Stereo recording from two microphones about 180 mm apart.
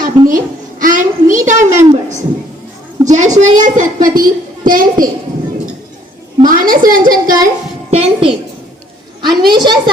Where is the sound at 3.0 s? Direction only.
40° right (ahead or behind).